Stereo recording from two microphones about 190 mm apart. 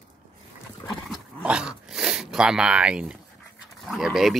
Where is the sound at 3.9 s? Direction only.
Centre (ahead or behind).